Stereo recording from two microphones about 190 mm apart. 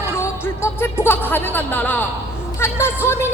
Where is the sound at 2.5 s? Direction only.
15° left (ahead or behind).